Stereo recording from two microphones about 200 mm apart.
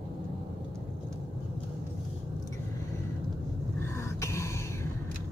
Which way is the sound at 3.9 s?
15° left (ahead or behind).